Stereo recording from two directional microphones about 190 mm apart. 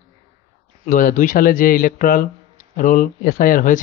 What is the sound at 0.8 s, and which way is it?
Speech, 40° left (ahead or behind).